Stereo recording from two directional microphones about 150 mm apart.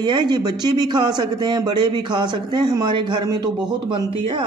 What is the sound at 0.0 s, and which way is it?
A man's voice, 30° right (ahead or behind).